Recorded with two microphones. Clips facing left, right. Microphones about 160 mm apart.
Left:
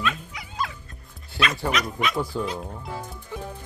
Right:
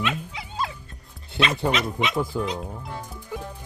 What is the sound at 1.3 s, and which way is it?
Speech, 25° right (ahead or behind).